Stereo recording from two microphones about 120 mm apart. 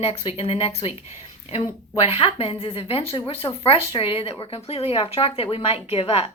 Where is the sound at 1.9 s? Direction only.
55° left (ahead or behind).